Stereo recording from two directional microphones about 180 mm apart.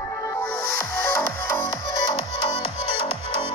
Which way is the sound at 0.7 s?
15° left (ahead or behind).